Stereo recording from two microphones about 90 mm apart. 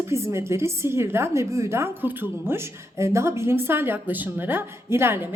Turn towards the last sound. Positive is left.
turn(degrees=-25)  # may be behind; listen again after turning